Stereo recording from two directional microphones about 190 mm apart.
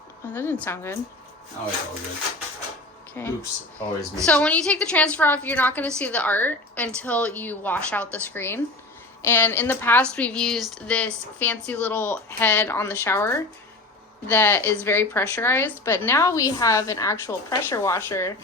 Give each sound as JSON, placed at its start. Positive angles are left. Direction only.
{"t": 0.3, "sound": "speech", "side_deg": 10}
{"t": 3.2, "sound": "speech", "side_deg": 10}